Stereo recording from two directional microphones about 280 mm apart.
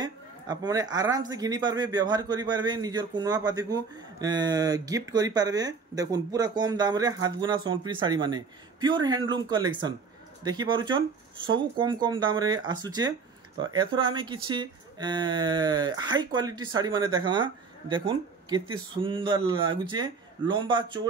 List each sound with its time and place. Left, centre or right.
0.0 s speech: centre